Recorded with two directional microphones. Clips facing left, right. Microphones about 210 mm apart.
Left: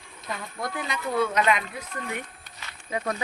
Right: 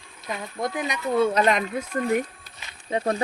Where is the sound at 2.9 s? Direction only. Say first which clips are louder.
Right 5 dB; 30° right (ahead or behind).